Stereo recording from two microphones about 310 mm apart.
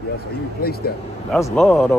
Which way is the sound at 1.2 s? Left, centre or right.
Centre.